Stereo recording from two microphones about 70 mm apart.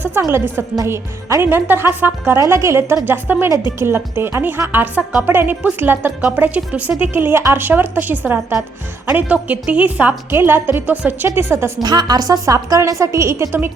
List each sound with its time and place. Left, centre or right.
0.3 s a woman's voice: right
10.3 s a woman's voice: right
11.8 s a woman's voice: right